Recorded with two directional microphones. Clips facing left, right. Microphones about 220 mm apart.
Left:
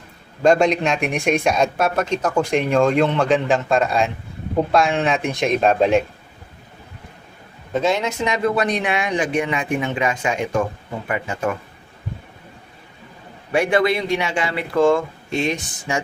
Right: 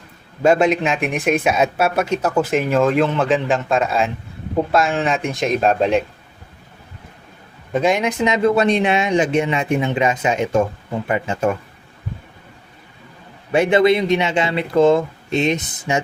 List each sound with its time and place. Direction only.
0.4 s speech: 5° right (ahead or behind)
7.7 s speech: 15° right (ahead or behind)
13.5 s speech: 20° right (ahead or behind)